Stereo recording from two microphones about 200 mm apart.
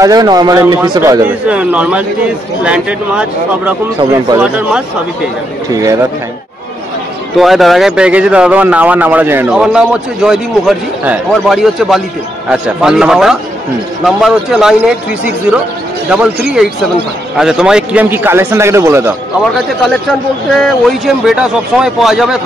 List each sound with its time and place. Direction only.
0.0 s a man's voice: 20° right (ahead or behind)
1.2 s a man's voice: 5° right (ahead or behind)
5.7 s a man's voice: 15° right (ahead or behind)
7.3 s speech: centre (ahead or behind)
16.1 s a man's voice: 5° right (ahead or behind)
20.5 s speech: centre (ahead or behind)